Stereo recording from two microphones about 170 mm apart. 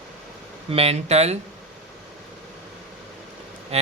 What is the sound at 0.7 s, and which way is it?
Speech, 35° right (ahead or behind).